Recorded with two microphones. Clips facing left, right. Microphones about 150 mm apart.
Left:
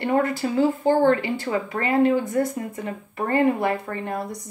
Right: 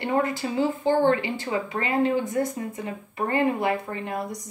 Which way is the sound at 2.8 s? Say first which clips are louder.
Left 1 dB; 45° left (ahead or behind).